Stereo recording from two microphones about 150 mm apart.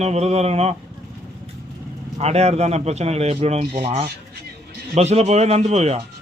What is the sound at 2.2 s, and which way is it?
A man's voice, 45° right (ahead or behind).